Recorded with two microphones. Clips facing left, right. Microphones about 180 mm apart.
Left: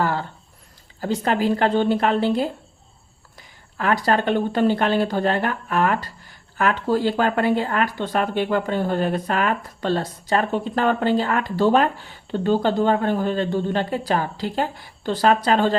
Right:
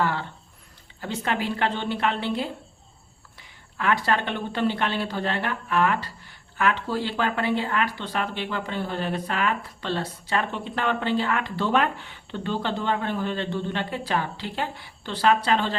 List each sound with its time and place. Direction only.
0.0 s a woman's voice: 40° left (ahead or behind)